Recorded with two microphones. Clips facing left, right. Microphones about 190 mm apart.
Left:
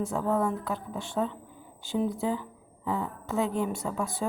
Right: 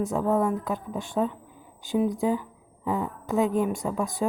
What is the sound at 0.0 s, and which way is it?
A woman's voice, 20° right (ahead or behind).